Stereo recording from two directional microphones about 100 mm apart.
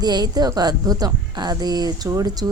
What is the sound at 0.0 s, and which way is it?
A woman's voice, 45° right (ahead or behind).